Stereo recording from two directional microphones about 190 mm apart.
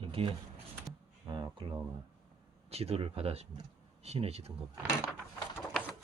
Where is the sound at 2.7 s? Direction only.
30° right (ahead or behind).